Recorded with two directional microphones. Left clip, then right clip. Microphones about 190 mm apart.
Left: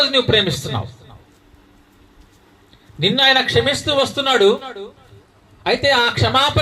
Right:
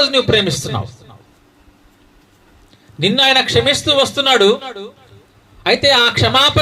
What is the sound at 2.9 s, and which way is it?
Speech, 50° right (ahead or behind).